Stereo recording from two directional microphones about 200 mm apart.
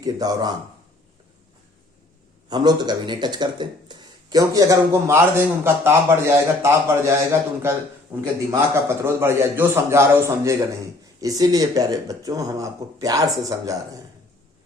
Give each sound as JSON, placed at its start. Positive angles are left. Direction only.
{"t": 0.0, "sound": "a man's voice", "side_deg": -20}
{"t": 2.5, "sound": "speech", "side_deg": -20}